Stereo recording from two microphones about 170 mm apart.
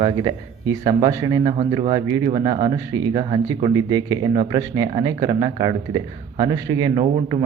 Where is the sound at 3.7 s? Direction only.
20° right (ahead or behind).